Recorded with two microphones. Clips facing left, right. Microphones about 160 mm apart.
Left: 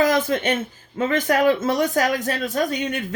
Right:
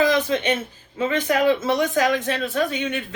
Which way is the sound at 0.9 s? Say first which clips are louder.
Left 1 dB; 45° left (ahead or behind).